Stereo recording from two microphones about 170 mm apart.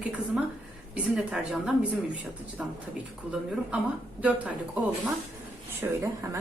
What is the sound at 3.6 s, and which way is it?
Speech, 5° right (ahead or behind).